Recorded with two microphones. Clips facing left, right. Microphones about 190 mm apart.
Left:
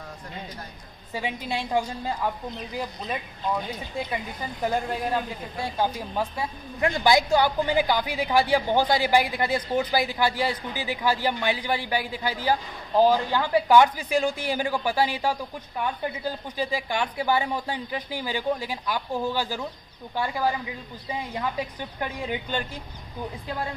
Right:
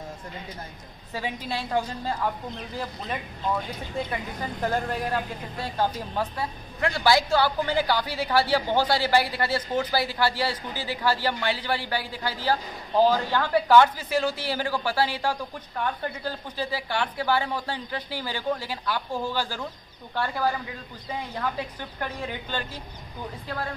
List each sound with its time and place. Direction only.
1.1 s a woman's voice: 15° left (ahead or behind)